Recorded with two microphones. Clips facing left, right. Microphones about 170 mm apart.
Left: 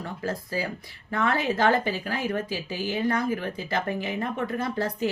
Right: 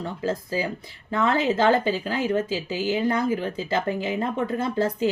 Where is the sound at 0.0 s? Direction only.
25° right (ahead or behind).